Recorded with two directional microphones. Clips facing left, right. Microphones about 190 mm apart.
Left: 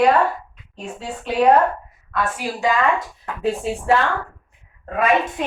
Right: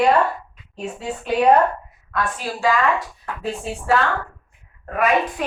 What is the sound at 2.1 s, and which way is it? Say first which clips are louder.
Speech: left 1 dB; 10° left (ahead or behind).